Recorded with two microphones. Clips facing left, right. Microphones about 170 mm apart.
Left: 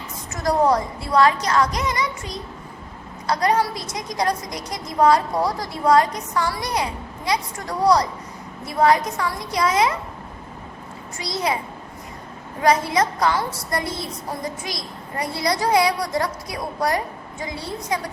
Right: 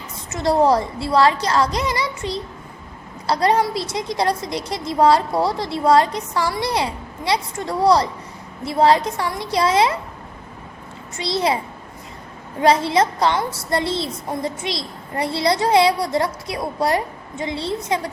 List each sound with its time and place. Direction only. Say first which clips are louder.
0.3 s a woman's voice: right 3 dB; 25° right (ahead or behind)
11.2 s a woman's voice: right 4 dB; 30° right (ahead or behind)
12.6 s a woman's voice: right 3 dB; 30° right (ahead or behind)